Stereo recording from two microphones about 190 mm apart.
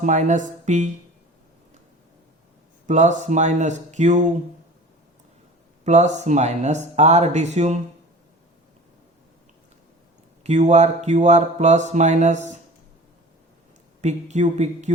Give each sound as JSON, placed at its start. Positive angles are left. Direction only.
{"t": 0.0, "sound": "speech", "side_deg": -40}
{"t": 2.8, "sound": "speech", "side_deg": -40}
{"t": 5.8, "sound": "speech", "side_deg": -35}
{"t": 10.4, "sound": "speech", "side_deg": -35}
{"t": 14.0, "sound": "speech", "side_deg": -35}